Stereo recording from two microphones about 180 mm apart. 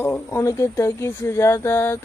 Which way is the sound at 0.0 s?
15° left (ahead or behind).